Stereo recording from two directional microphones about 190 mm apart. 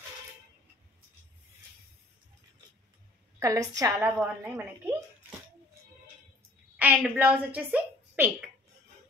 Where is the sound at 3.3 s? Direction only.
15° right (ahead or behind).